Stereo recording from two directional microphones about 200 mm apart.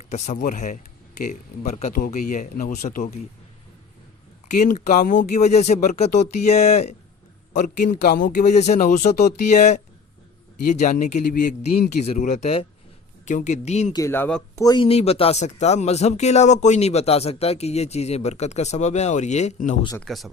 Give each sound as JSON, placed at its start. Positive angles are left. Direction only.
{"t": 0.1, "sound": "speech", "side_deg": 40}
{"t": 4.5, "sound": "a man's voice", "side_deg": 35}
{"t": 13.9, "sound": "speech", "side_deg": 15}
{"t": 14.6, "sound": "speech", "side_deg": 20}
{"t": 20.0, "sound": "speech", "side_deg": 0}